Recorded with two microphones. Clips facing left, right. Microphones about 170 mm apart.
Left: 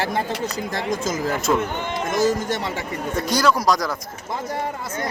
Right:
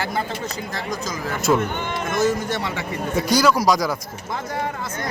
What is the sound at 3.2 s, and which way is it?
Speech, centre (ahead or behind).